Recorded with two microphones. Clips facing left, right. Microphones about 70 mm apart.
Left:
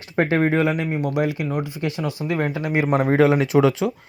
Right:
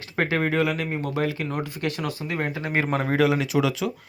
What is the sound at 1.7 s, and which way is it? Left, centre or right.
Speech, right.